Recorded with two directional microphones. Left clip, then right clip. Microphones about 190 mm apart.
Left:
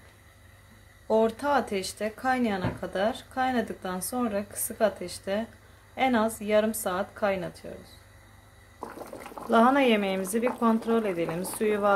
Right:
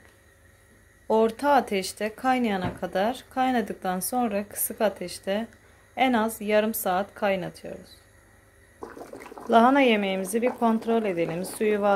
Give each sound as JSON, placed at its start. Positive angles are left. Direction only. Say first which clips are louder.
{"t": 1.0, "sound": "speech", "louder": "right 2 dB", "side_deg": -25}
{"t": 9.5, "sound": "a woman's voice", "louder": "right 3 dB", "side_deg": -20}